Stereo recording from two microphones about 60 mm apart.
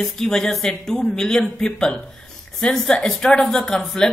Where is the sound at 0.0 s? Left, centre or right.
Centre.